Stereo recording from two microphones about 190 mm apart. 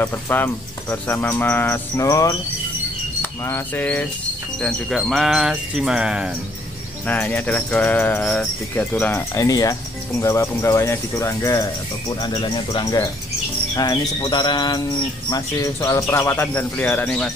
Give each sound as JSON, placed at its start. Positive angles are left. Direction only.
{"t": 0.0, "sound": "speech", "side_deg": 10}
{"t": 3.2, "sound": "bird", "side_deg": 10}
{"t": 4.6, "sound": "cricket", "side_deg": 0}
{"t": 7.1, "sound": "speech", "side_deg": 10}
{"t": 12.2, "sound": "a sound", "side_deg": 20}
{"t": 15.2, "sound": "speech", "side_deg": 20}